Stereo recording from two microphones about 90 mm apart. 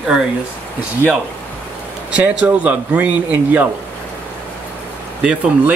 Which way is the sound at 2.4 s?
15° right (ahead or behind).